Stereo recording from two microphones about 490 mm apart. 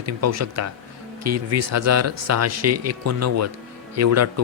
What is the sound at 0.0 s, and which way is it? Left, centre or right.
A man's voice, right.